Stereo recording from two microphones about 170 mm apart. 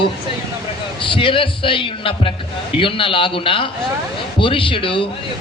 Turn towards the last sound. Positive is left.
turn(degrees=30)  # may be behind; listen again after turning